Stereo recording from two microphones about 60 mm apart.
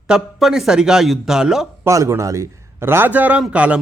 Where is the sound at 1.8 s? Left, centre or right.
Right.